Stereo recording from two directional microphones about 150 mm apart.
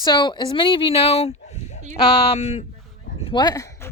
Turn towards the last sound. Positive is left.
turn(degrees=20)  # may be behind; listen again after turning